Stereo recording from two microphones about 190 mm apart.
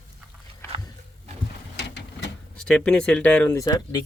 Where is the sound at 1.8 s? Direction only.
65° left (ahead or behind).